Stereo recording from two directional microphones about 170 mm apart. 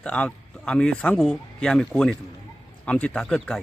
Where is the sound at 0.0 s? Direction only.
10° left (ahead or behind).